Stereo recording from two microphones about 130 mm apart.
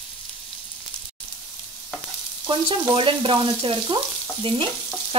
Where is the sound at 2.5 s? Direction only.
35° right (ahead or behind).